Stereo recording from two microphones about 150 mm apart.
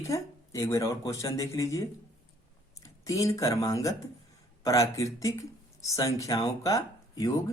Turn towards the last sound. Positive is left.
turn(degrees=25)  # may be behind; listen again after turning